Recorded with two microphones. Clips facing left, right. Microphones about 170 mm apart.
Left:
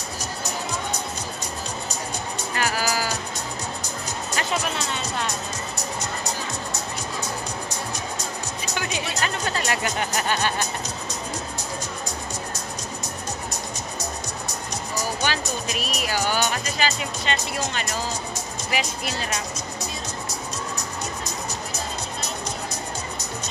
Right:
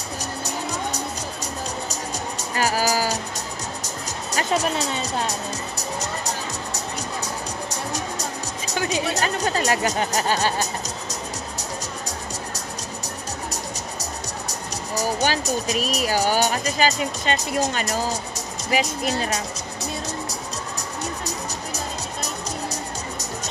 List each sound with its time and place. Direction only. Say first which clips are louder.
2.5 s music: right 4 dB; 40° right (ahead or behind)
4.3 s speech: right 5 dB; 35° right (ahead or behind)
7.7 s music: right 2 dB; 40° right (ahead or behind)
8.7 s speech: right 6 dB; 40° right (ahead or behind)
15.0 s speech: right 4 dB; 40° right (ahead or behind)
21.3 s music: right 1 dB; 40° right (ahead or behind)